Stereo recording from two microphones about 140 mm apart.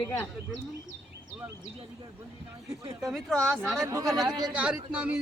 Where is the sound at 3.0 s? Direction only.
Centre (ahead or behind).